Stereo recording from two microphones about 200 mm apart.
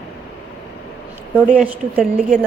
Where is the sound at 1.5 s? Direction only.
5° right (ahead or behind).